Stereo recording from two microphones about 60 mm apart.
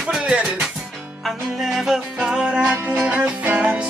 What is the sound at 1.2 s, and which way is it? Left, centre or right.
Music, centre.